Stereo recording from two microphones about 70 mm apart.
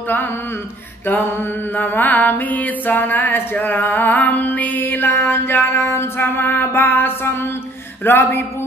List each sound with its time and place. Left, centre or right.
1.8 s music: left
8.0 s speech: left